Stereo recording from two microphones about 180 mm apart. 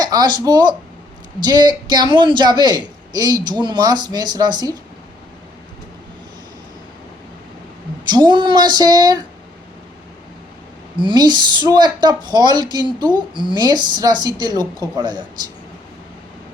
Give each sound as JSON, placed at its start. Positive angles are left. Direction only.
{"t": 0.0, "sound": "a woman's voice", "side_deg": -20}
{"t": 8.1, "sound": "a woman's voice", "side_deg": -25}
{"t": 10.9, "sound": "a woman's voice", "side_deg": -25}